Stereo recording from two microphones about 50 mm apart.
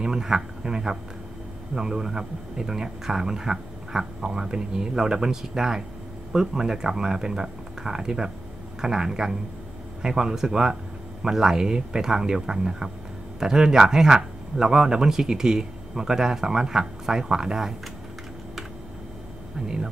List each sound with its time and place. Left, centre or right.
0.0 s speech: centre
19.6 s speech: centre